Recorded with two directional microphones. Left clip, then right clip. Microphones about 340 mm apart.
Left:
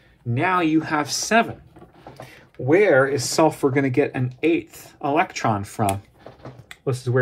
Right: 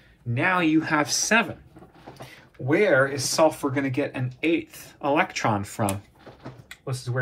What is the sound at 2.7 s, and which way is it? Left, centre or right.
Speech, left.